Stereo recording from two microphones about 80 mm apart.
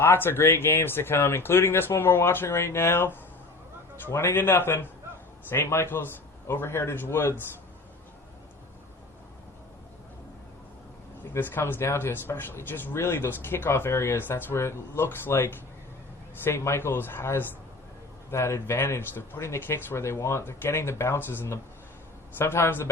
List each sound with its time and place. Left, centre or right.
0.0 s speech: left
11.3 s speech: left